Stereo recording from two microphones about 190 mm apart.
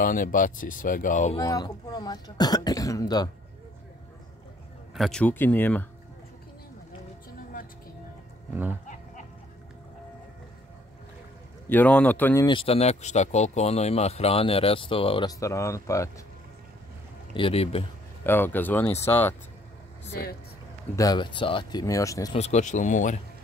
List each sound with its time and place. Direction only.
0.0 s speech: 45° left (ahead or behind)
1.4 s speech: 20° left (ahead or behind)
4.9 s speech: centre (ahead or behind)
11.7 s speech: 10° left (ahead or behind)
12.4 s speech: 30° left (ahead or behind)
17.3 s speech: 30° left (ahead or behind)
18.2 s speech: 10° left (ahead or behind)
20.1 s speech: 55° left (ahead or behind)
20.9 s speech: 20° left (ahead or behind)
22.3 s speech: 35° left (ahead or behind)